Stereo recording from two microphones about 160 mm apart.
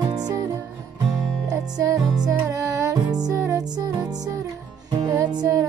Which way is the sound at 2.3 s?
20° right (ahead or behind).